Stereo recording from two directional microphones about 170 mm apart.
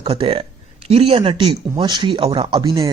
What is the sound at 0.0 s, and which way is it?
Speech, 30° right (ahead or behind).